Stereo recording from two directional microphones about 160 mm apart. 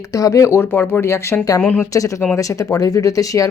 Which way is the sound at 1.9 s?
20° left (ahead or behind).